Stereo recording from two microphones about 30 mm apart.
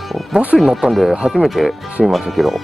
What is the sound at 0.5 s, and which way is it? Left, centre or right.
Speech, centre.